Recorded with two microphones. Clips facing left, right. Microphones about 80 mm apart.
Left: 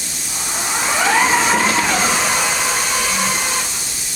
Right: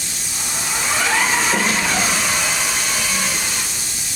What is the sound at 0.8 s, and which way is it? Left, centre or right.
Vehicle, left.